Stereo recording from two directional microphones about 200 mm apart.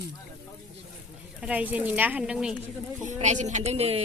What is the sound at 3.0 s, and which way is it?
Speech, 35° right (ahead or behind).